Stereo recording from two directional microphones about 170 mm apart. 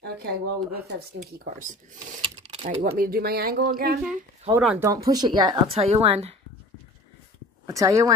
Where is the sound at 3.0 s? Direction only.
60° right (ahead or behind).